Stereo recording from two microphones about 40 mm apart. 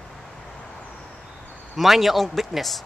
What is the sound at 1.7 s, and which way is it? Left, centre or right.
A man's voice, centre.